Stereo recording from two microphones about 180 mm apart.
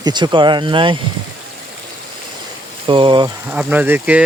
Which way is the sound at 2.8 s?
30° right (ahead or behind).